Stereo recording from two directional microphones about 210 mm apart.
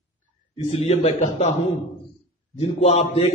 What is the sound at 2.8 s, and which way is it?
Speech, 30° left (ahead or behind).